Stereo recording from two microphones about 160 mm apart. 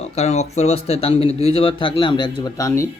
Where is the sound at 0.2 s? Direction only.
45° left (ahead or behind).